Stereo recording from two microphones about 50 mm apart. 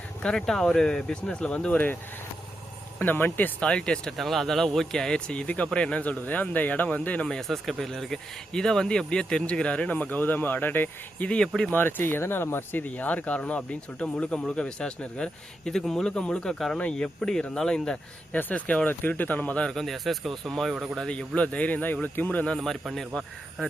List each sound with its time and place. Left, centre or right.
0.2 s speech: centre
3.0 s speech: left
3.6 s speech: centre
4.2 s speech: centre; by 7.3 s left
7.3 s speech: centre; by 11.3 s left
11.3 s speech: centre
11.7 s speech: left
12.8 s speech: left; by 16.0 s centre
16.0 s speech: left
18.3 s speech: left
19.7 s speech: centre
21.1 s speech: left
22.5 s speech: centre